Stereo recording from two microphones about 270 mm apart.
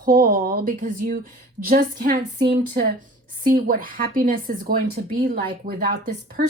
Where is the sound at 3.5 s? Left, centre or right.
Right.